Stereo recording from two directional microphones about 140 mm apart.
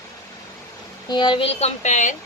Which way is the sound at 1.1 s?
30° left (ahead or behind).